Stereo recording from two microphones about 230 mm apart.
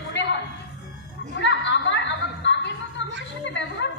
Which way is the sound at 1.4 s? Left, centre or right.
Left.